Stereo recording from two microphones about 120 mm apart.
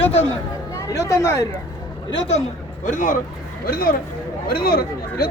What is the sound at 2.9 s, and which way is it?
Speech, 90° left.